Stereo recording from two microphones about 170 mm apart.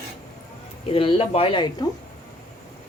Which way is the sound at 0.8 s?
35° left (ahead or behind).